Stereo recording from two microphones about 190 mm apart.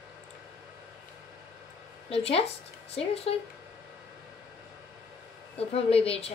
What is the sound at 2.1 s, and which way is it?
Speech, 30° left (ahead or behind).